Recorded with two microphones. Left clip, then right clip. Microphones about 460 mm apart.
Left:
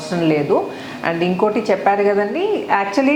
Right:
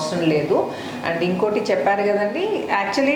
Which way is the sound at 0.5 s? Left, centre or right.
Left.